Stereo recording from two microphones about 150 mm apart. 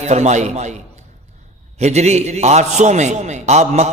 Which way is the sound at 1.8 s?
45° right (ahead or behind).